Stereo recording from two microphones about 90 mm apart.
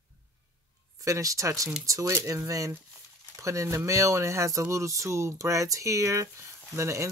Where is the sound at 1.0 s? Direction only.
40° right (ahead or behind).